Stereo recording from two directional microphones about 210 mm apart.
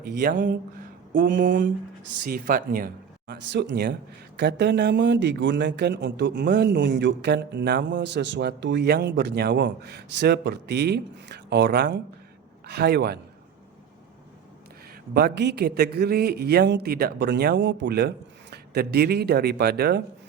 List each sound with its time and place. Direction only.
0.0 s a sound: 40° right (ahead or behind)
2.2 s speech: 40° right (ahead or behind)
15.1 s speech: 50° right (ahead or behind)